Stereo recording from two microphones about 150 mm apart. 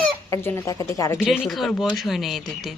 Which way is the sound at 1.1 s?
5° right (ahead or behind).